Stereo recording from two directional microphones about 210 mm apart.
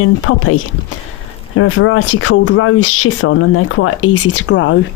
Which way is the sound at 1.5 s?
70° left (ahead or behind).